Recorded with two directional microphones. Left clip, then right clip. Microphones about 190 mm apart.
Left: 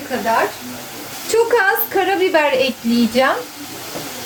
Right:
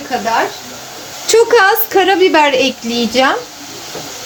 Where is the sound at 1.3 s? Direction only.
50° right (ahead or behind).